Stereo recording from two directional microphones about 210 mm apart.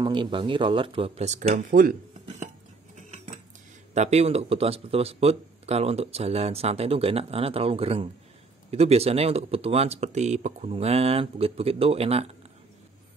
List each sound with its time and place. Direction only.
0.0 s speech: 20° right (ahead or behind)
1.5 s speech: 40° right (ahead or behind)
3.0 s cutlery: 30° right (ahead or behind)
3.9 s speech: 30° right (ahead or behind)